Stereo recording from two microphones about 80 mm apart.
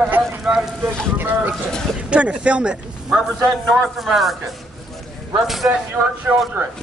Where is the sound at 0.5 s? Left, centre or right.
Centre.